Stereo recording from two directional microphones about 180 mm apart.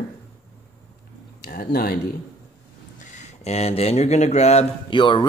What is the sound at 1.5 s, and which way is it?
Speech, 55° left (ahead or behind).